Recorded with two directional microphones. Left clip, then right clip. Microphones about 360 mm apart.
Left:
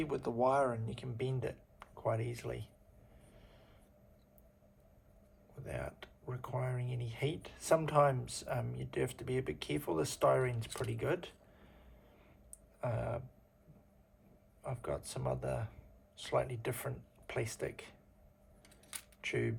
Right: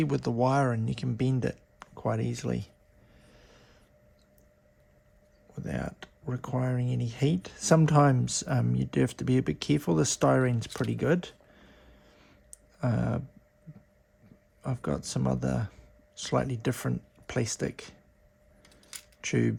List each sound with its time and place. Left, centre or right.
0.0 s speech: right
5.6 s speech: right
12.8 s speech: right
14.6 s speech: right
18.6 s coin: centre
19.2 s speech: right